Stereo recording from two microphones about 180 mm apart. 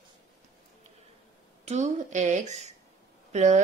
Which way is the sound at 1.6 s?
40° right (ahead or behind).